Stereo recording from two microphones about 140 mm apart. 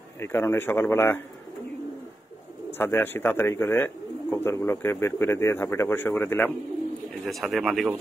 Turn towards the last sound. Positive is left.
turn(degrees=0)  # may be behind; listen again after turning